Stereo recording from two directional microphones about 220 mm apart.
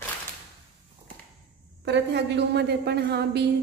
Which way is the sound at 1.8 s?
50° right (ahead or behind).